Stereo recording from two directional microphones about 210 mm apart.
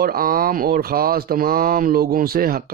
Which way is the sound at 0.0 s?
45° right (ahead or behind).